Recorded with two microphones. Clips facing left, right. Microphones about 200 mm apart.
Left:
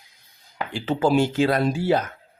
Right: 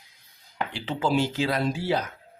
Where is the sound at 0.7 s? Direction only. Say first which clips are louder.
Left 6 dB; 45° left (ahead or behind).